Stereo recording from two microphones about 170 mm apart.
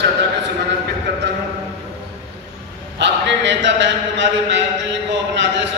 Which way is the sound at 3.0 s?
90° right.